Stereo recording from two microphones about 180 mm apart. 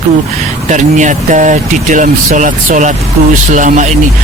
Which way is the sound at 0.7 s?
45° right (ahead or behind).